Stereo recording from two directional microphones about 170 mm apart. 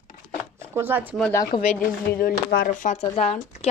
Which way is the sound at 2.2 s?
60° left (ahead or behind).